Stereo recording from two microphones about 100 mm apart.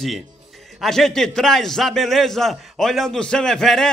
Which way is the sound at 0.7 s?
5° left (ahead or behind).